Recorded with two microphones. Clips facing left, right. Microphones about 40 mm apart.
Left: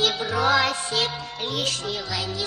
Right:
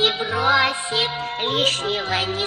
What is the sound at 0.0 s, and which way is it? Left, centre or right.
Music, right.